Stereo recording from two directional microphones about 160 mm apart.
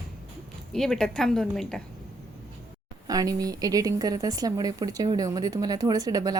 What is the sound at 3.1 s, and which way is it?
Speech, 20° right (ahead or behind).